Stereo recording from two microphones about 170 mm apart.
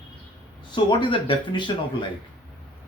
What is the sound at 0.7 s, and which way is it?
Speech, 30° left (ahead or behind).